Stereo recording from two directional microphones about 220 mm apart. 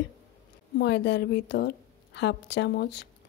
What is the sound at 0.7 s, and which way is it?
Speech, 50° left (ahead or behind).